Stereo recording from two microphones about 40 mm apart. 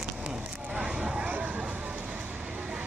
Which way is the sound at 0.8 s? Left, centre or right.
Centre.